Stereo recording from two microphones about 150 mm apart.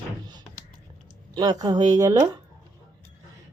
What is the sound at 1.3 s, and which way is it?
Speech, 25° right (ahead or behind).